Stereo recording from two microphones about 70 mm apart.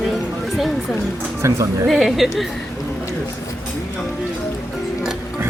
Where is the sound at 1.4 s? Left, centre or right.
Right.